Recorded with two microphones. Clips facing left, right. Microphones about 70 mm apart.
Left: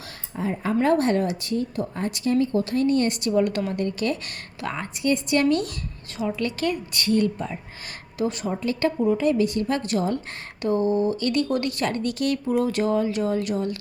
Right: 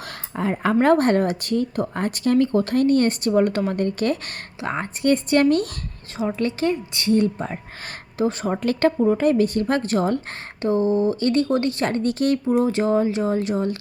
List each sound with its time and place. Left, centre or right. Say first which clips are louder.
0.3 s speech: right 4 dB; right
4.6 s a woman's voice: right 4 dB; right
5.0 s speech: right 4 dB; right
6.1 s a woman's voice: right 3 dB; right
8.4 s speech: right 5 dB; right
10.6 s speech: right 2 dB; right